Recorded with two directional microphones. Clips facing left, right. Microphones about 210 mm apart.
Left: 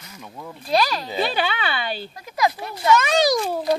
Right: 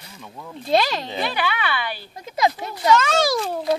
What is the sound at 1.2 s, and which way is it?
Speech, 25° left (ahead or behind).